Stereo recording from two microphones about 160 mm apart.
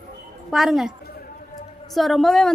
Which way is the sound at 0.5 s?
Centre (ahead or behind).